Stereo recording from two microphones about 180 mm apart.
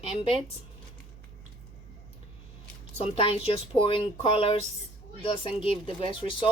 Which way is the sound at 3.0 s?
30° left (ahead or behind).